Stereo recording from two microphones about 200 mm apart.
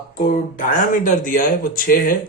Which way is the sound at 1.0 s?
40° left (ahead or behind).